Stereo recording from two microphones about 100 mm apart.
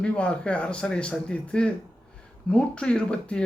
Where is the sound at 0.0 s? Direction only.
10° left (ahead or behind).